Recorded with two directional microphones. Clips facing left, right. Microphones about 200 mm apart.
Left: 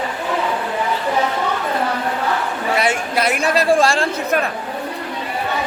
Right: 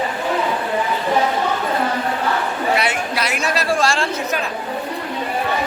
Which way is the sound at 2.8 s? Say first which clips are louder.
Left 3 dB; 50° left (ahead or behind).